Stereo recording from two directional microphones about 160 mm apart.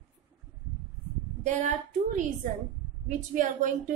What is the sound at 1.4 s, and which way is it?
A woman's voice, 45° right (ahead or behind).